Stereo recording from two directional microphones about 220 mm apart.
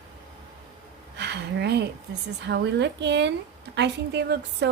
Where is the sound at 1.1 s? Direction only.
50° right (ahead or behind).